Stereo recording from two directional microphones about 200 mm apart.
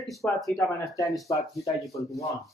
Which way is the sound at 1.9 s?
15° left (ahead or behind).